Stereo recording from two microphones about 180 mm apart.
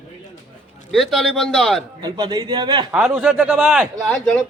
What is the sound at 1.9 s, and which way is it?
Speech, 25° right (ahead or behind).